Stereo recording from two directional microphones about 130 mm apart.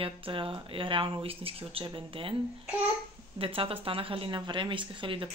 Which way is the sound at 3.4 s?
45° right (ahead or behind).